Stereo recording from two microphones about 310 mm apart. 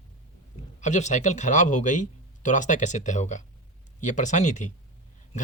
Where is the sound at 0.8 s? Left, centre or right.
Left.